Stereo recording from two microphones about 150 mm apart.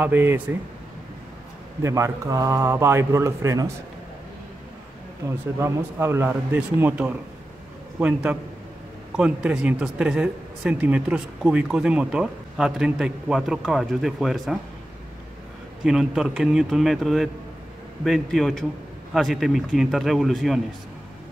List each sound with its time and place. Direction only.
0.0 s a man's voice: 15° right (ahead or behind)
1.8 s a man's voice: 20° right (ahead or behind)
5.6 s a man's voice: 15° right (ahead or behind)
15.8 s speech: 5° right (ahead or behind)